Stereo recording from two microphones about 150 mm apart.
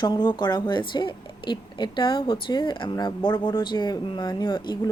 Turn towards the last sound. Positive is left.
turn(degrees=30)  # may be behind; listen again after turning